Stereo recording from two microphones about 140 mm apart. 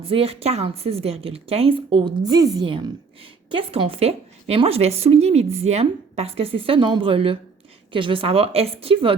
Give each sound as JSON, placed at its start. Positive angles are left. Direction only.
{"t": 0.1, "sound": "a woman's voice", "side_deg": -45}